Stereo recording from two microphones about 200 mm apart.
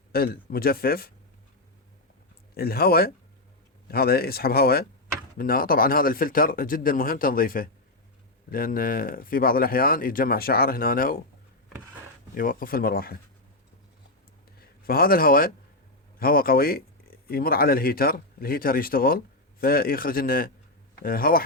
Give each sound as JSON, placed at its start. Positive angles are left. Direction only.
{"t": 0.1, "sound": "speech", "side_deg": 50}
{"t": 2.6, "sound": "speech", "side_deg": 50}
{"t": 12.3, "sound": "speech", "side_deg": 45}
{"t": 14.6, "sound": "a man's voice", "side_deg": 50}